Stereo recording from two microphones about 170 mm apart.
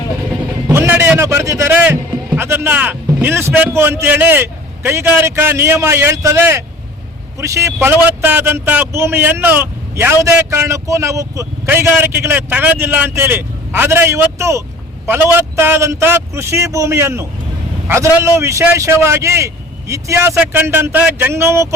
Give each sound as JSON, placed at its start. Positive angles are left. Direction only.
{"t": 0.7, "sound": "sheep", "side_deg": -15}
{"t": 7.3, "sound": "a man's voice", "side_deg": -15}